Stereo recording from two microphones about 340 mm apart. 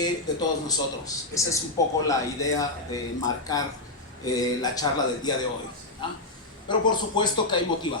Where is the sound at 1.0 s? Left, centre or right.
Centre.